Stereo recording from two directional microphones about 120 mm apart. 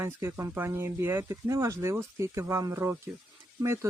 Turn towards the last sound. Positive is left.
turn(degrees=-25)  # may be behind; listen again after turning